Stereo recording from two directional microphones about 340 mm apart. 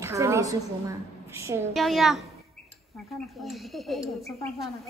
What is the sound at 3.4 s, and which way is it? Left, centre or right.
Speech, centre.